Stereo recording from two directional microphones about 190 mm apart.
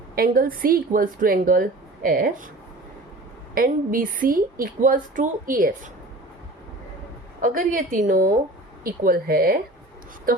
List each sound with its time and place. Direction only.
0.2 s a woman's voice: 50° right (ahead or behind)
3.5 s a woman's voice: 50° right (ahead or behind)
7.4 s a woman's voice: 45° right (ahead or behind)